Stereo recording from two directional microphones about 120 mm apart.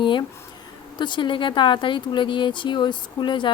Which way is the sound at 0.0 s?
40° left (ahead or behind).